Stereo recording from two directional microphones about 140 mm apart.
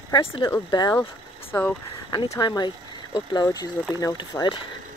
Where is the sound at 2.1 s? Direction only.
30° left (ahead or behind).